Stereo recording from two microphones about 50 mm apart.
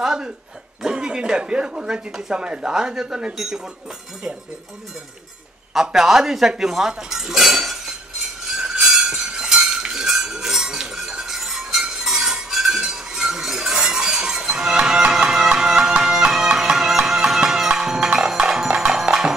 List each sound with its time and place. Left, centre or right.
0.0 s speech: centre
5.8 s speech: centre
8.5 s chink: centre
15.9 s music: centre